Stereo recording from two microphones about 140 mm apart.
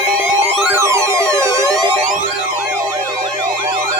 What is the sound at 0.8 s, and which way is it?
Music, 20° right (ahead or behind).